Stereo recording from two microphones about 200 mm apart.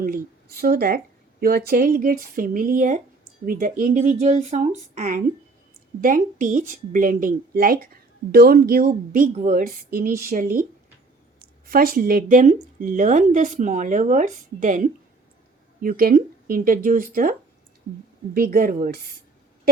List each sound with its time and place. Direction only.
0.0 s speech: 45° right (ahead or behind)
11.6 s speech: 45° right (ahead or behind)
18.3 s speech: 45° right (ahead or behind)